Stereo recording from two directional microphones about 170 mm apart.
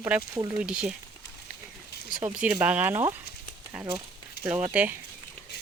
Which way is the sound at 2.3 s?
10° right (ahead or behind).